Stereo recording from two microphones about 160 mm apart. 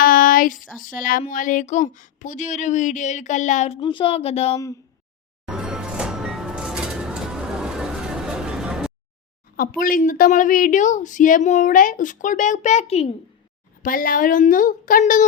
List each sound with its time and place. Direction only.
0.0 s a sound: 60° left (ahead or behind)
0.8 s a woman's voice: 60° left (ahead or behind)
3.8 s speech: 30° left (ahead or behind)
4.5 s speech: 20° left (ahead or behind)
5.5 s music: 5° right (ahead or behind)
9.6 s a woman's voice: 60° left (ahead or behind); by 13.1 s 40° left (ahead or behind)
13.8 s a woman's voice: 60° left (ahead or behind)